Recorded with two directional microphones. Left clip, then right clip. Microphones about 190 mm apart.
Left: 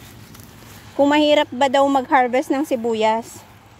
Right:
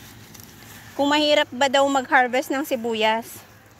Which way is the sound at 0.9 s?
35° left (ahead or behind).